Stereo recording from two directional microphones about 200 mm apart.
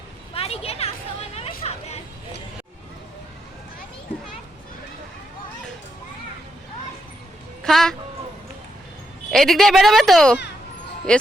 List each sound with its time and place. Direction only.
0.3 s a sound: 30° left (ahead or behind)
1.4 s chatter: 30° left (ahead or behind)
7.6 s a woman's voice: centre (ahead or behind)
9.3 s a woman's voice: centre (ahead or behind)